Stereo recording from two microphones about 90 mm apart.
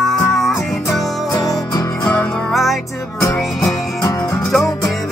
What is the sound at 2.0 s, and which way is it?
Music, 5° left (ahead or behind).